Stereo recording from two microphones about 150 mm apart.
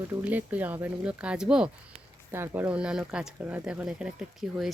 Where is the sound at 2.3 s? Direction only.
15° right (ahead or behind).